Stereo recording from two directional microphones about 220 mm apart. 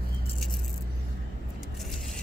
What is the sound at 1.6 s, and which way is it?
Vehicle, centre (ahead or behind).